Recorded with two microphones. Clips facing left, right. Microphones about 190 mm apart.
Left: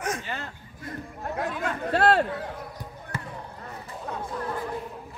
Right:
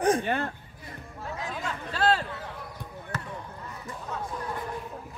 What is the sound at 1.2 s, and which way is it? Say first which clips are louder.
Speech: left 5 dB; 60° left (ahead or behind).